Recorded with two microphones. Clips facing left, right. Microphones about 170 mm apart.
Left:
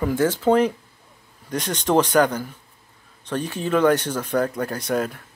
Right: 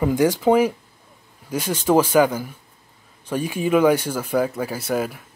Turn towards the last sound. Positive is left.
turn(degrees=-5)  # may be behind; listen again after turning